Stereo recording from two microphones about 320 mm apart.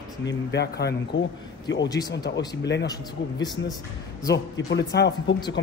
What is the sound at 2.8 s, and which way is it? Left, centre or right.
Speech, centre.